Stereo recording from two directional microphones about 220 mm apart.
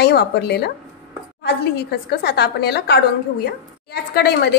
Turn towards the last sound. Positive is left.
turn(degrees=45)  # may be behind; listen again after turning